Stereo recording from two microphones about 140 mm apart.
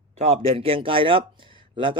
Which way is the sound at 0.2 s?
45° right (ahead or behind).